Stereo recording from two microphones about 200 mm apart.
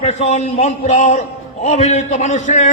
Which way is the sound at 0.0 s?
35° left (ahead or behind).